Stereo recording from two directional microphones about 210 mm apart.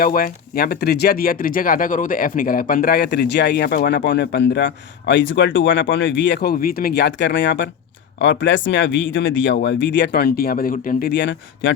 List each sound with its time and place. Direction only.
0.0 s speech: 45° left (ahead or behind); by 11.7 s 60° left (ahead or behind)